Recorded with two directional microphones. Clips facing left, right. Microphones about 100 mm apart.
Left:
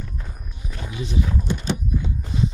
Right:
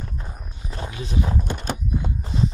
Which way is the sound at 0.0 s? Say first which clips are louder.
Right 1 dB; 30° right (ahead or behind).